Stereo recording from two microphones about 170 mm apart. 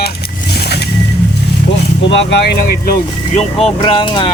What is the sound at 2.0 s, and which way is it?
Speech, 90° left.